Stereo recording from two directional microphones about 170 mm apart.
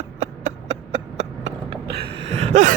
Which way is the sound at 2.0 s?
35° right (ahead or behind).